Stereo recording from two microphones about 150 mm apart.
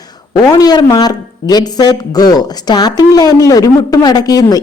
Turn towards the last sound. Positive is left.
turn(degrees=25)  # may be behind; listen again after turning